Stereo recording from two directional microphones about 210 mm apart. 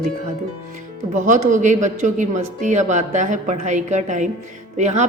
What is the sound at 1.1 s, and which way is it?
A woman's voice, 35° right (ahead or behind).